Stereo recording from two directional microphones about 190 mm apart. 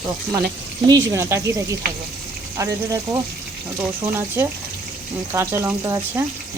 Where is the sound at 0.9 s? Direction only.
15° right (ahead or behind).